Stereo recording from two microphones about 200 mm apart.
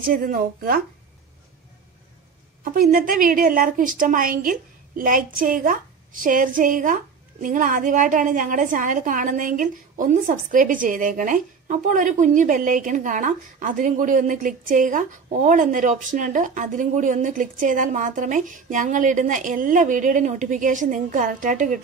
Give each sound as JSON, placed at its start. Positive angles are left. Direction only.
{"t": 0.0, "sound": "a woman's voice", "side_deg": -45}
{"t": 2.6, "sound": "a woman's voice", "side_deg": -45}